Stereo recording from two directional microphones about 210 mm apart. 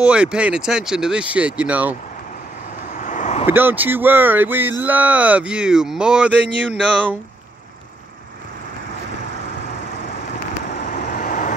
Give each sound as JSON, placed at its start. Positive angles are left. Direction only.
{"t": 0.0, "sound": "speech", "side_deg": -5}
{"t": 3.0, "sound": "vehicle", "side_deg": 40}
{"t": 3.4, "sound": "speech", "side_deg": -10}
{"t": 10.9, "sound": "vehicle", "side_deg": 40}